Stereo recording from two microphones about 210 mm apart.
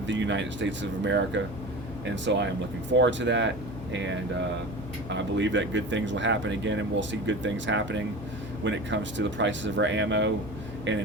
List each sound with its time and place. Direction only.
0.1 s speech: 60° right (ahead or behind)